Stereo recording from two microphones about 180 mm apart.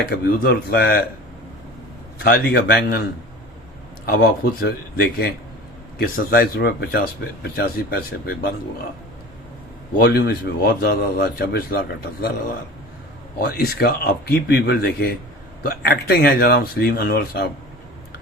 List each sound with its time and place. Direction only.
0.3 s speech: 60° left (ahead or behind)
2.2 s speech: 60° left (ahead or behind)
4.0 s speech: 60° left (ahead or behind)
10.0 s speech: 60° left (ahead or behind)
13.4 s speech: 60° left (ahead or behind)